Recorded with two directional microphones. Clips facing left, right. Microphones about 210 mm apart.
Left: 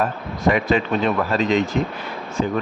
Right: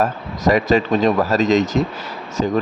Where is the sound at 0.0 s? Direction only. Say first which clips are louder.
Right 2 dB; 40° right (ahead or behind).